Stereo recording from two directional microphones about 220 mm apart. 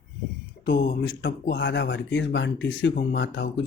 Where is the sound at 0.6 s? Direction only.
50° left (ahead or behind).